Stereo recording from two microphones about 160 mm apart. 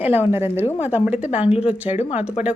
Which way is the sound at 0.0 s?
10° right (ahead or behind).